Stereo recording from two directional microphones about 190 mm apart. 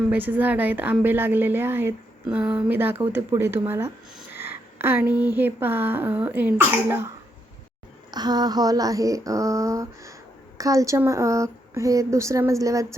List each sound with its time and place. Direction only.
0.1 s a woman's voice: 10° right (ahead or behind)
8.1 s a woman's voice: 20° right (ahead or behind)